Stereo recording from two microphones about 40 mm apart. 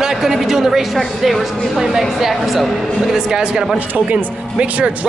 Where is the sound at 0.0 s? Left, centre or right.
Centre.